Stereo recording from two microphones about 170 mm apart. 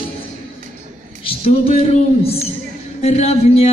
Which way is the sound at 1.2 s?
35° left (ahead or behind).